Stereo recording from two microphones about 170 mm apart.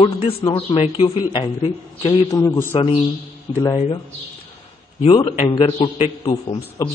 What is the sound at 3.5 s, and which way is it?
Speech, 25° left (ahead or behind).